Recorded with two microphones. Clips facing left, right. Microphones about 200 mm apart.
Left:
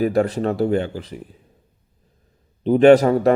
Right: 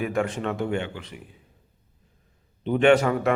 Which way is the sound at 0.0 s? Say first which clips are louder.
Left 7 dB; 35° left (ahead or behind).